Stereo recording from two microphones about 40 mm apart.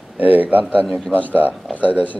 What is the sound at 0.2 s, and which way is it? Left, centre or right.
Speech, right.